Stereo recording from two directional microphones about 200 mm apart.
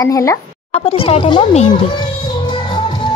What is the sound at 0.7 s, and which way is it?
Speech, 30° left (ahead or behind).